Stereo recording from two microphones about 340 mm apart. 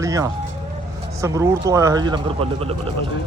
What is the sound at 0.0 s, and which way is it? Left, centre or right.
Vehicle, centre.